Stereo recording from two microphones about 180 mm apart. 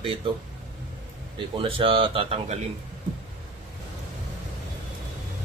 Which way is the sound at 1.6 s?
30° right (ahead or behind).